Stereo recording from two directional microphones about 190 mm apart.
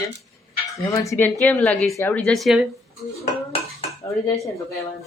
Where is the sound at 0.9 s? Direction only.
15° left (ahead or behind).